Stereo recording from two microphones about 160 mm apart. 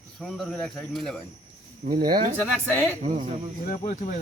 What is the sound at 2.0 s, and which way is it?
Speech, 30° right (ahead or behind).